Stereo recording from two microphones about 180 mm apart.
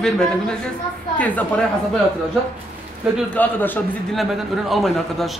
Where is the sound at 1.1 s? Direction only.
10° left (ahead or behind).